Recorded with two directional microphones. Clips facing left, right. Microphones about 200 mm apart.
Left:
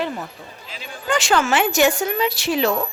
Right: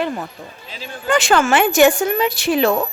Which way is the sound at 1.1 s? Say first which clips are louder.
Right 4 dB; 55° right (ahead or behind).